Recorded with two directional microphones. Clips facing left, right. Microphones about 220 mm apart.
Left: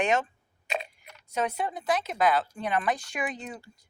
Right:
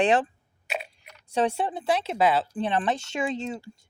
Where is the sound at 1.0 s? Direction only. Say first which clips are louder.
Right 7 dB; 30° right (ahead or behind).